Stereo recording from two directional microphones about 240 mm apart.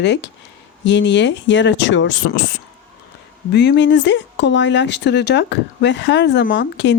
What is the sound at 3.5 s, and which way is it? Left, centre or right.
Speech, left.